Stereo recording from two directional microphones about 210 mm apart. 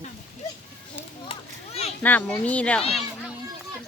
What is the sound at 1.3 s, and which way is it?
Children playing, 30° left (ahead or behind).